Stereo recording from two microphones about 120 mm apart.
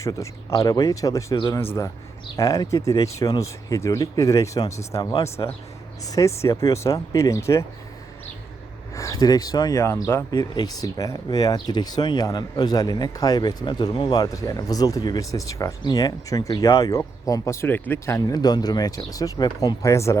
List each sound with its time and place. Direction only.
0.0 s speech: 25° left (ahead or behind)
9.0 s speech: 25° left (ahead or behind)
10.3 s speech: 35° left (ahead or behind)
18.4 s speech: 35° left (ahead or behind)